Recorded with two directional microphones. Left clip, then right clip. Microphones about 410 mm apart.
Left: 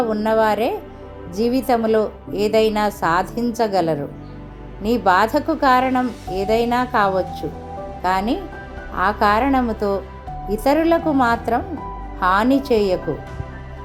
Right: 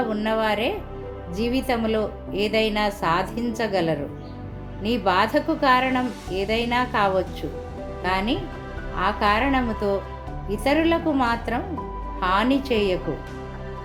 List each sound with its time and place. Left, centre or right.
0.1 s a woman's voice: centre